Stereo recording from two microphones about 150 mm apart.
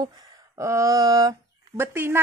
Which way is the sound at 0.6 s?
20° right (ahead or behind).